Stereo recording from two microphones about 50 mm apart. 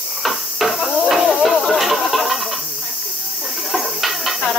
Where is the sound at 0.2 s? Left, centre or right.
Centre.